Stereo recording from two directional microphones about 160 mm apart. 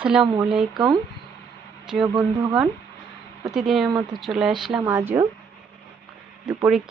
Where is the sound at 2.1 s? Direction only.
25° right (ahead or behind).